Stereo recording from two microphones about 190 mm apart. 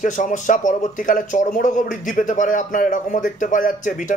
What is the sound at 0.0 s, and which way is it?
Speech, 40° left (ahead or behind).